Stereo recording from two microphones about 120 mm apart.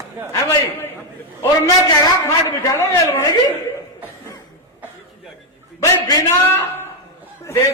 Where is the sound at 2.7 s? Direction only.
20° left (ahead or behind).